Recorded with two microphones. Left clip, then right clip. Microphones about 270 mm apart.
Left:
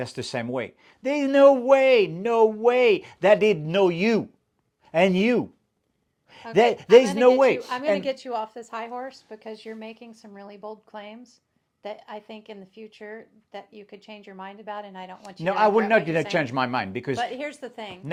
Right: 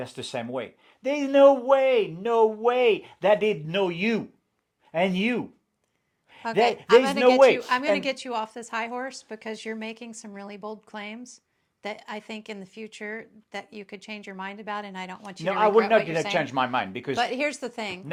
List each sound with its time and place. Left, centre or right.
0.0 s speech: left
6.5 s a man's voice: left
7.9 s a woman's voice: centre
15.4 s speech: left
17.2 s speech: right